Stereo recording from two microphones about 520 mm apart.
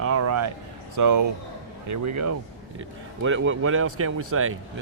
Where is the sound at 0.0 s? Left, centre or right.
Right.